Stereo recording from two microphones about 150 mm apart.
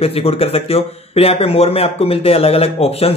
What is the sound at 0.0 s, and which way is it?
Speech, 40° left (ahead or behind).